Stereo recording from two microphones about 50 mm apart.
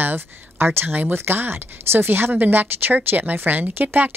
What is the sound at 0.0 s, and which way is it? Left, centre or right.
Speech, right.